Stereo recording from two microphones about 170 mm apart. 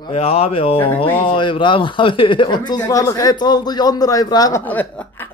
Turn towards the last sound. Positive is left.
turn(degrees=10)  # may be behind; listen again after turning